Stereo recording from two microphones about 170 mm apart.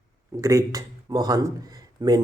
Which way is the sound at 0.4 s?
20° right (ahead or behind).